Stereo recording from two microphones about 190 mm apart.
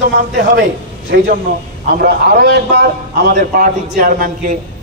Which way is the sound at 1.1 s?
60° right (ahead or behind).